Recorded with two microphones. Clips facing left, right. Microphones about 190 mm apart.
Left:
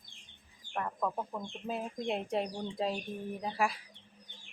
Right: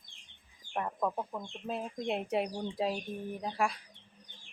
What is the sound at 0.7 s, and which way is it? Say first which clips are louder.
A woman's voice: right 1 dB; 10° right (ahead or behind).